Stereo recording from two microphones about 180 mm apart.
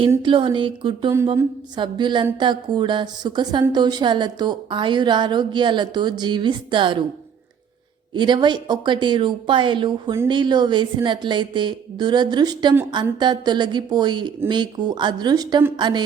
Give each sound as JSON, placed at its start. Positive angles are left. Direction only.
{"t": 0.2, "sound": "a woman's voice", "side_deg": -30}
{"t": 8.1, "sound": "a woman's voice", "side_deg": -25}